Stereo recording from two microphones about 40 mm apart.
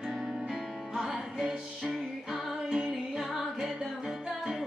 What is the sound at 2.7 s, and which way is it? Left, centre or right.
Music, centre.